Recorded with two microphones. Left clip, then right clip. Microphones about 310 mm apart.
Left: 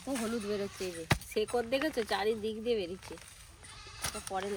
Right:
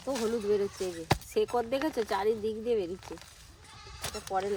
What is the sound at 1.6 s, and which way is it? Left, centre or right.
Speech, right.